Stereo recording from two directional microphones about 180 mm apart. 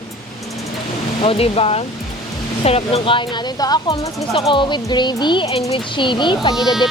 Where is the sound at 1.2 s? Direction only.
30° left (ahead or behind).